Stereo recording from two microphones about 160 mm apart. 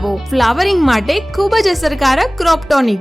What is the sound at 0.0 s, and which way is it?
Speech, centre (ahead or behind).